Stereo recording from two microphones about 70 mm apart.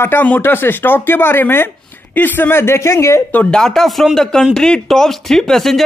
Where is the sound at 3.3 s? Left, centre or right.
Centre.